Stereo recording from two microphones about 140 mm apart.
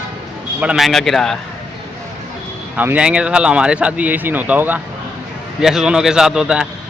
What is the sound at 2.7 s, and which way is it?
Speech, 10° right (ahead or behind).